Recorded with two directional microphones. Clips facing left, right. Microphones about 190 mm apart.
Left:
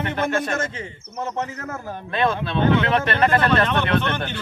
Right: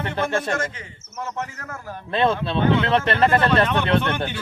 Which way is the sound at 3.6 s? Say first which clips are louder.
Right 1 dB; 10° right (ahead or behind).